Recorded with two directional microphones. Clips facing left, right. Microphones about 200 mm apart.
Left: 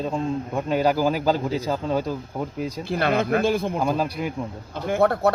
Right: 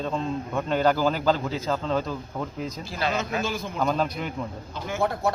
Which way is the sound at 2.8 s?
60° left (ahead or behind).